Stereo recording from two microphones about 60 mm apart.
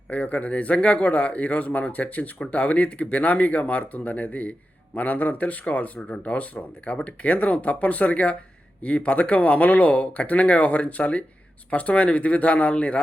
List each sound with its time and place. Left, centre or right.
0.1 s speech: left